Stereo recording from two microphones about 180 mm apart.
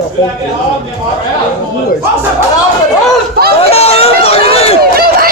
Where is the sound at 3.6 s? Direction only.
35° left (ahead or behind).